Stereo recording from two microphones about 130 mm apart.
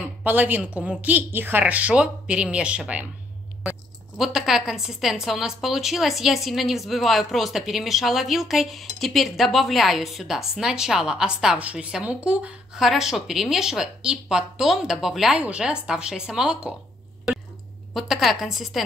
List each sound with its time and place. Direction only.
0.2 s speech: 15° right (ahead or behind)
4.2 s a woman's voice: 5° right (ahead or behind)
17.9 s a woman's voice: centre (ahead or behind)